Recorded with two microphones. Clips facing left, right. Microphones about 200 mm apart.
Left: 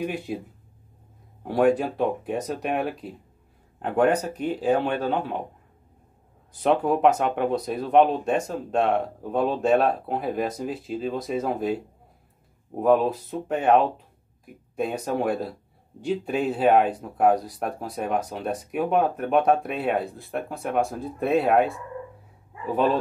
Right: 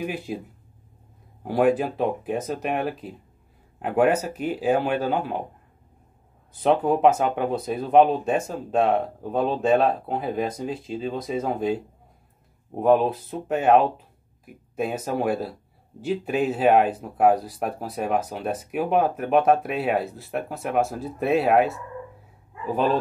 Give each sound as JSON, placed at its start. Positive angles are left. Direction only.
{"t": 0.0, "sound": "speech", "side_deg": 0}
{"t": 1.4, "sound": "speech", "side_deg": -5}
{"t": 6.5, "sound": "speech", "side_deg": 0}
{"t": 12.8, "sound": "speech", "side_deg": 0}